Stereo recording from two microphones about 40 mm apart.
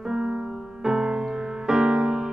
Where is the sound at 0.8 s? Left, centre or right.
Centre.